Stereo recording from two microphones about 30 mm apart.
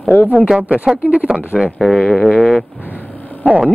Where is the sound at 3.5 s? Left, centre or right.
Right.